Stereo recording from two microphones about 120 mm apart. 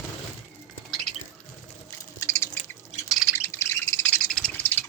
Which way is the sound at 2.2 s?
25° left (ahead or behind).